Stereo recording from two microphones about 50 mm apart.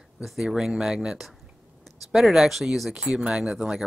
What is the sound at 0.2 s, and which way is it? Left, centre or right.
Speech, centre.